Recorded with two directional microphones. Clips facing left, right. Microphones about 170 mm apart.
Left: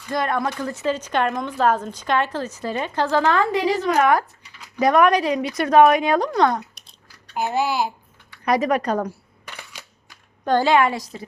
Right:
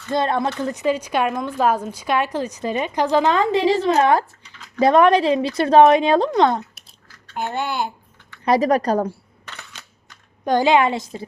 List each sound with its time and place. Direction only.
0.1 s a woman's voice: 25° right (ahead or behind)
7.3 s babbling: 5° left (ahead or behind)
8.4 s speech: 35° right (ahead or behind)
9.5 s a sound: 10° left (ahead or behind)
10.4 s speech: 15° right (ahead or behind)